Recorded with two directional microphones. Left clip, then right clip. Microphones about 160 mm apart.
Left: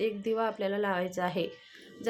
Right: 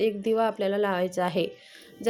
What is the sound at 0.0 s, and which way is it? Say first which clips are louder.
A woman's voice: right 6 dB; 35° right (ahead or behind).